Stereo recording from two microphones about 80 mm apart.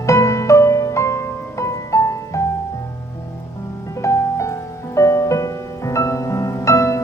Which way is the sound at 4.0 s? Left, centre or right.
Left.